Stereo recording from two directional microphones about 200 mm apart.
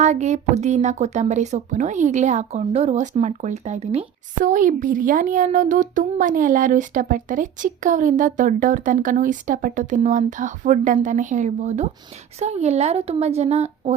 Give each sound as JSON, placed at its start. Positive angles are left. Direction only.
{"t": 0.0, "sound": "a woman's voice", "side_deg": -35}